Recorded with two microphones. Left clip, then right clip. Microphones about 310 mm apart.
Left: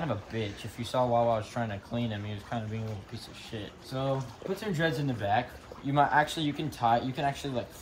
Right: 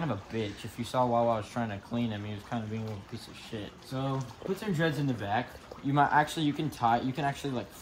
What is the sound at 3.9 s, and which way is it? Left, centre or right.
Speech, centre.